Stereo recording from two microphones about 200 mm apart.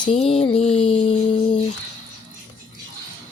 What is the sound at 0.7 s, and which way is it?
Speech, 30° left (ahead or behind).